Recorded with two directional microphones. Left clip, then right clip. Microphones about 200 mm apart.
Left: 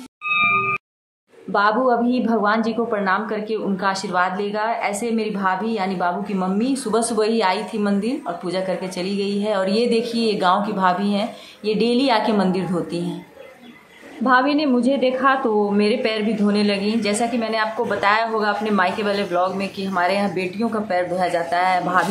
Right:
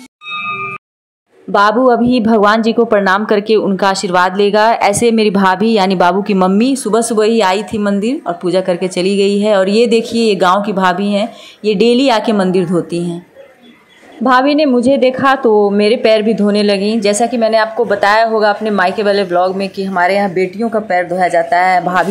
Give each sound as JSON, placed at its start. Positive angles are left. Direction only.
{"t": 1.5, "sound": "a woman's voice", "side_deg": -30}
{"t": 14.2, "sound": "a woman's voice", "side_deg": -30}